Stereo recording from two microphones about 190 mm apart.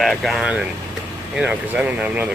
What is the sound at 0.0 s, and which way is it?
Speech, centre (ahead or behind).